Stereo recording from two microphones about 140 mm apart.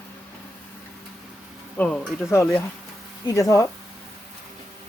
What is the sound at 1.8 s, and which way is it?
Speech, 10° left (ahead or behind).